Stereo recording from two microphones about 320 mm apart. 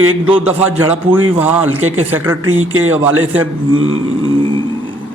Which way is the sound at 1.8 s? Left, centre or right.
Right.